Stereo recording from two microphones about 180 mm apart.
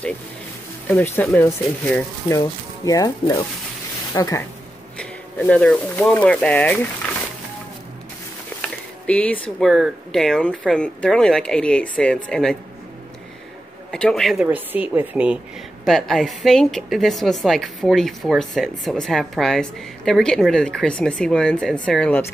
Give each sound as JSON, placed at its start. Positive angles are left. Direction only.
{"t": 0.8, "sound": "speech", "side_deg": 10}
{"t": 4.9, "sound": "speech", "side_deg": 5}
{"t": 9.0, "sound": "a woman's voice", "side_deg": 10}
{"t": 13.9, "sound": "a woman's voice", "side_deg": 5}